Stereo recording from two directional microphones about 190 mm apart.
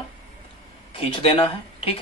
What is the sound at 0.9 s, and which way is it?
Speech, 30° left (ahead or behind).